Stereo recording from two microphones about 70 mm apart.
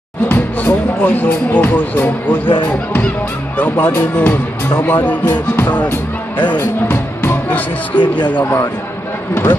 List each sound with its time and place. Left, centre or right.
0.3 s speech: left
3.5 s speech: left
9.3 s speech: left